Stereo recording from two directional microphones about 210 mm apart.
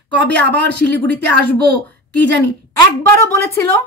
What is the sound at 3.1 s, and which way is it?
Speech, 10° left (ahead or behind).